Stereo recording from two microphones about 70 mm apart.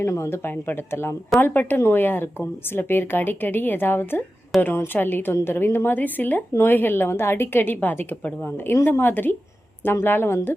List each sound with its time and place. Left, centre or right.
0.0 s speech: left
0.5 s speech: left